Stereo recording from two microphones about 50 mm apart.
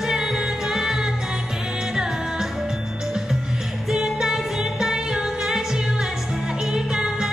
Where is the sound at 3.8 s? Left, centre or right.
Centre.